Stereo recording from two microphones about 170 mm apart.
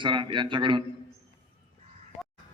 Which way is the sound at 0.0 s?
30° right (ahead or behind).